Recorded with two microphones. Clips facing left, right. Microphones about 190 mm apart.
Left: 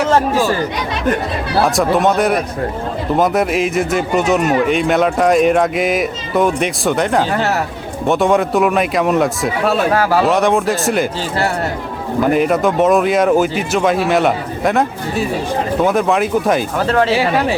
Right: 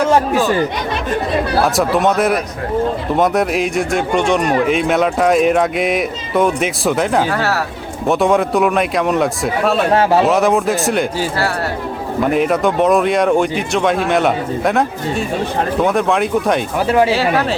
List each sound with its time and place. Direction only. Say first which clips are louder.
1.6 s speech: left 3 dB; centre (ahead or behind)
7.3 s speech: left 1 dB; 20° left (ahead or behind)
8.0 s speech: even; centre (ahead or behind)
9.9 s speech: right 2 dB; 25° right (ahead or behind)
10.2 s speech: even; centre (ahead or behind)
12.2 s speech: left 1 dB; centre (ahead or behind)
16.7 s speech: right 1 dB; 10° right (ahead or behind)
17.2 s speech: left 1 dB; 15° left (ahead or behind)